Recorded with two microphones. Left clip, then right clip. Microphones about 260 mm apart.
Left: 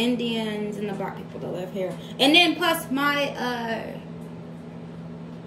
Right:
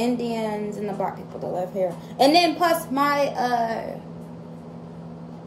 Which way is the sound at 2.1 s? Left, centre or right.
Left.